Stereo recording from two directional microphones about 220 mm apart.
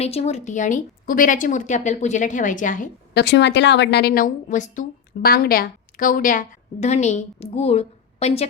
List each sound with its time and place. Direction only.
0.0 s a woman's voice: 30° left (ahead or behind)
3.2 s a woman's voice: 50° left (ahead or behind); by 8.4 s 30° left (ahead or behind)